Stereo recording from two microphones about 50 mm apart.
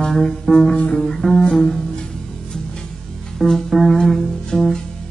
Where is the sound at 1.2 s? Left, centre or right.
Centre.